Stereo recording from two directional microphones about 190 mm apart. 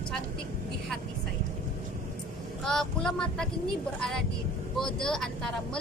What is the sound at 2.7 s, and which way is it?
Speech, 5° left (ahead or behind).